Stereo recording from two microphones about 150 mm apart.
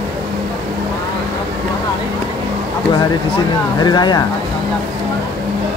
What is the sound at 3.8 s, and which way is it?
Speech, 30° left (ahead or behind).